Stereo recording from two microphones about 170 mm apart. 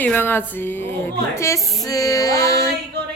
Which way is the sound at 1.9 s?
20° left (ahead or behind).